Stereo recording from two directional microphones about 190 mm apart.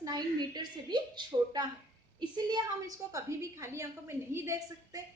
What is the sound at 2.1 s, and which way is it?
A woman's voice, 20° right (ahead or behind).